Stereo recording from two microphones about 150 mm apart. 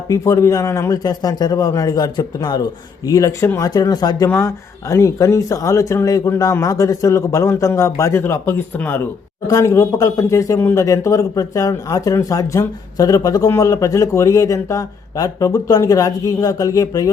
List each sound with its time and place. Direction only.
0.1 s speech: 20° left (ahead or behind)